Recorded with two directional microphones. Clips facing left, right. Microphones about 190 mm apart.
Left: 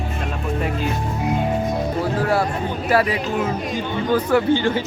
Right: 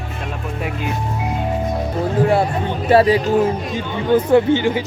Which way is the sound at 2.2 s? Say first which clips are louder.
Right 4 dB; 20° right (ahead or behind).